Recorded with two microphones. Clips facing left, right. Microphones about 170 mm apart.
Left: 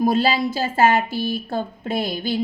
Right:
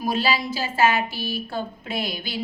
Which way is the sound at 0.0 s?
55° left (ahead or behind).